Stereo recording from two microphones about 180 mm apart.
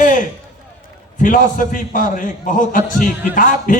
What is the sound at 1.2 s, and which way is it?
A man's voice, 50° left (ahead or behind).